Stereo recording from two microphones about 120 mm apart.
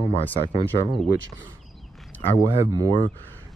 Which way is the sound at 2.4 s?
25° right (ahead or behind).